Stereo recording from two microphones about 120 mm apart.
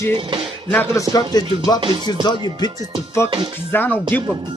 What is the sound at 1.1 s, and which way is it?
Speech, 35° left (ahead or behind).